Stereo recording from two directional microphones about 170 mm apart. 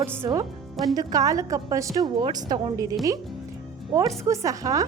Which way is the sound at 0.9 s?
20° right (ahead or behind).